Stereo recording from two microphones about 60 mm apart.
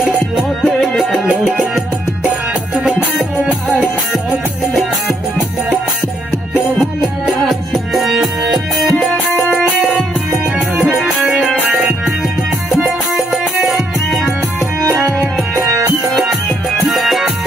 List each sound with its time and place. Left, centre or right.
0.6 s music: centre
4.7 s music: centre
7.3 s music: centre
9.0 s music: centre
9.5 s music: centre
9.9 s music: centre
16.8 s music: centre